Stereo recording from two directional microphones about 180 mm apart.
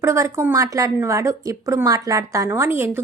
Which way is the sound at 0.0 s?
15° right (ahead or behind).